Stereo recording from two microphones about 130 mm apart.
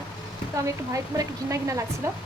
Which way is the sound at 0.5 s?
25° right (ahead or behind).